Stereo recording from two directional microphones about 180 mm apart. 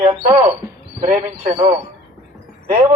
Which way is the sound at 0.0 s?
35° right (ahead or behind).